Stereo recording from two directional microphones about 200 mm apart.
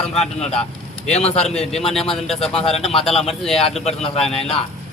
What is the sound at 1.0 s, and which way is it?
Speech, 30° left (ahead or behind).